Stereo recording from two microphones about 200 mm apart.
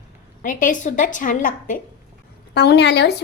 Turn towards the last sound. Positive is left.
turn(degrees=60)  # may be behind; listen again after turning